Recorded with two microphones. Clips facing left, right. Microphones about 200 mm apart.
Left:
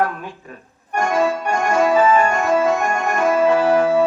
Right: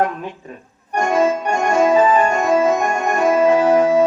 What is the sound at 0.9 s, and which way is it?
Organ, 20° right (ahead or behind).